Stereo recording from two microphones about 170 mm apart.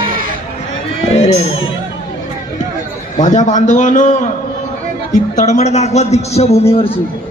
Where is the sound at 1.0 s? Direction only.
40° left (ahead or behind).